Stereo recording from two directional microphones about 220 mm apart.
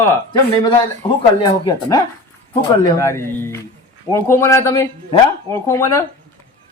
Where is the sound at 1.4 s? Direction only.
20° left (ahead or behind).